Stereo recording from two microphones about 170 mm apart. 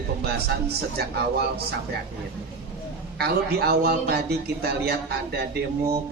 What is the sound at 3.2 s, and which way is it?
A man's voice, 65° right (ahead or behind).